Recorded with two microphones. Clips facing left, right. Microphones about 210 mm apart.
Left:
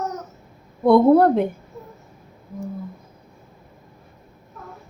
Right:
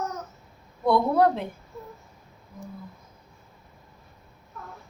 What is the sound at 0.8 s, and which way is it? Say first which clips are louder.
Speech: left 8 dB; 55° left (ahead or behind).